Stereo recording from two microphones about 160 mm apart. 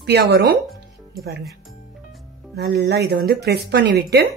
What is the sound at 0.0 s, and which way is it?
Speech, 90° right.